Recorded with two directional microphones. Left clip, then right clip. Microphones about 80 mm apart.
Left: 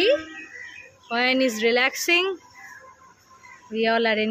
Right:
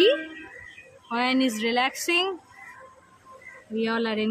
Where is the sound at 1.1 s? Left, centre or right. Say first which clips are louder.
Left 3 dB; centre.